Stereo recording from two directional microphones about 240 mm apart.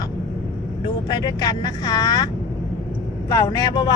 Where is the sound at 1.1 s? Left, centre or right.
Centre.